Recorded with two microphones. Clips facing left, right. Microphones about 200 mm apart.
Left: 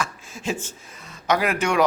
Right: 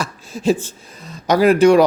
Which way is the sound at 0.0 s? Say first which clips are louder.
Right 9 dB; 35° right (ahead or behind).